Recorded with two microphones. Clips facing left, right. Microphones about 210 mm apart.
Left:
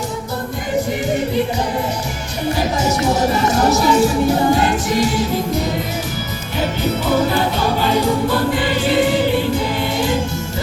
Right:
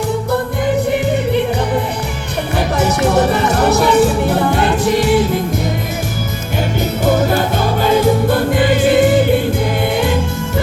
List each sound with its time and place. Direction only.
2.6 s music: 60° right (ahead or behind)
7.8 s music: 50° right (ahead or behind)